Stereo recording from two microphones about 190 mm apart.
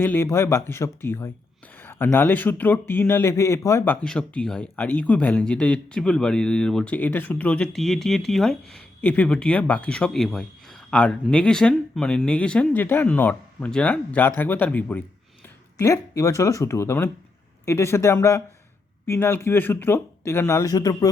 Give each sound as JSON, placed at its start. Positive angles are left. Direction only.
{"t": 0.0, "sound": "speech", "side_deg": 10}
{"t": 4.0, "sound": "speech", "side_deg": 5}